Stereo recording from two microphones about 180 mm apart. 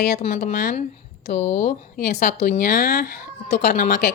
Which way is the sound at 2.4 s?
55° left (ahead or behind).